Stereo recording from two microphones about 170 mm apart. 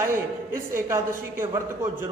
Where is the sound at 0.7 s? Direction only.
15° right (ahead or behind).